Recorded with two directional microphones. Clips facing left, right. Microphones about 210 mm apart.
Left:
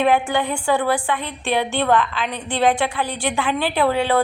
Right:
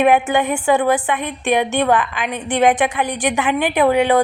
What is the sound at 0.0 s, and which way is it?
A woman's voice, 20° right (ahead or behind).